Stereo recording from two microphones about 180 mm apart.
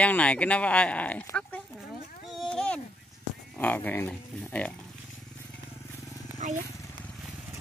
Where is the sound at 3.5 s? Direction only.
10° left (ahead or behind).